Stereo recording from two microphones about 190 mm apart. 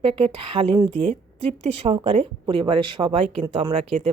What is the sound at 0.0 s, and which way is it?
Speech, 30° right (ahead or behind).